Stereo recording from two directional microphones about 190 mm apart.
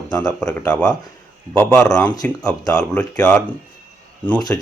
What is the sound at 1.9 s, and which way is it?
Speech, 15° left (ahead or behind).